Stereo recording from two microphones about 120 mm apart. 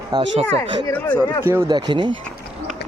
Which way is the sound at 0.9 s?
10° left (ahead or behind).